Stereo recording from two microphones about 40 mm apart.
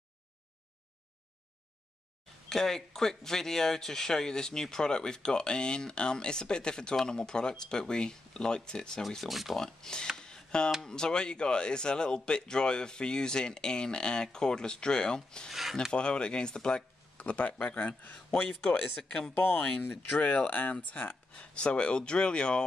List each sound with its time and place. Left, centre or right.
2.5 s speech: centre
9.0 s speech: centre
9.6 s speech: centre
10.1 s a sound: centre
10.9 s speech: centre; by 18.5 s left
18.9 s speech: left
19.3 s speech: left
19.8 s speech: left
20.2 s speech: left
21.4 s speech: left